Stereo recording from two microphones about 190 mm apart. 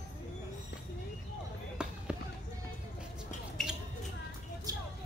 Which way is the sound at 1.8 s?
5° right (ahead or behind).